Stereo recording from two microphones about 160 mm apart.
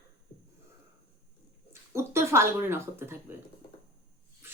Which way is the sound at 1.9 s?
15° right (ahead or behind).